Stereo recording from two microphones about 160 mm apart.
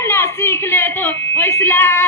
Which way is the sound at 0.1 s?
15° left (ahead or behind).